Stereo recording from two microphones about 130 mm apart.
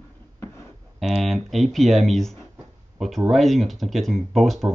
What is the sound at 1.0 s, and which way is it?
Speech, centre (ahead or behind).